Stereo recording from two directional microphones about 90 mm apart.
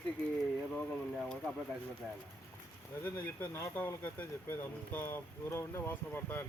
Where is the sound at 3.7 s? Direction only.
20° left (ahead or behind).